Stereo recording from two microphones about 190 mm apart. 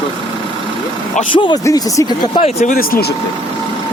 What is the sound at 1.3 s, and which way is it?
Speech, 25° left (ahead or behind).